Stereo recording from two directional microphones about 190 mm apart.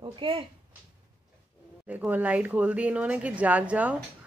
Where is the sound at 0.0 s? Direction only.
25° right (ahead or behind).